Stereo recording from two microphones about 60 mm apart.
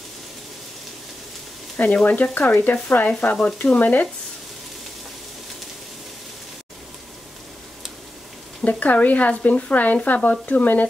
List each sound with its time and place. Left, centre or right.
2.0 s speech: left
8.6 s speech: left